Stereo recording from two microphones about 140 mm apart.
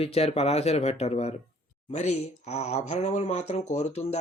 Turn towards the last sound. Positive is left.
turn(degrees=55)  # may be behind; listen again after turning